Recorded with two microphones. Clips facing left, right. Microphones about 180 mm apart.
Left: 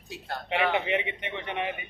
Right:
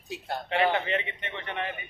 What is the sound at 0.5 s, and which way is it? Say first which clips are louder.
A man's voice: even; 15° left (ahead or behind).